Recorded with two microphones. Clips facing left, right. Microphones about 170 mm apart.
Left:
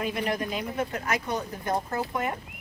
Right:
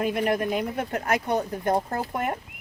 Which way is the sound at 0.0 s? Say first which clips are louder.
Right 5 dB; 50° right (ahead or behind).